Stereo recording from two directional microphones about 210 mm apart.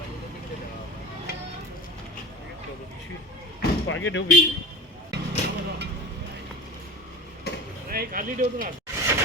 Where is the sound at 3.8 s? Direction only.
65° left (ahead or behind).